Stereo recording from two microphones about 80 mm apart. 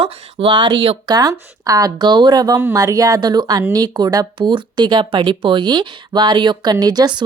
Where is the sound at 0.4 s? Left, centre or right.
Right.